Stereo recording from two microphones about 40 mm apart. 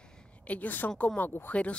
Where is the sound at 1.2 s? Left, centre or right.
Left.